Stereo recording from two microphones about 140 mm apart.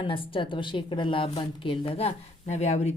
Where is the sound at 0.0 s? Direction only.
40° left (ahead or behind).